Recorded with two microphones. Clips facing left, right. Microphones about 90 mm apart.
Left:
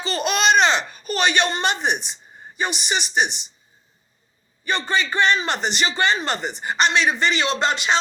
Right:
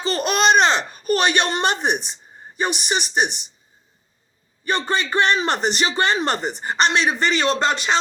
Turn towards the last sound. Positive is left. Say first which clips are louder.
# right 2 dB
turn(degrees=-45)  # may be behind; listen again after turning